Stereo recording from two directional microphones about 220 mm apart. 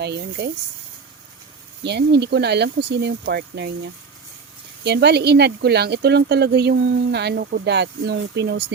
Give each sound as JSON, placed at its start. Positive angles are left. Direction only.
{"t": 0.0, "sound": "speech", "side_deg": -50}
{"t": 1.8, "sound": "speech", "side_deg": -50}
{"t": 4.8, "sound": "speech", "side_deg": -50}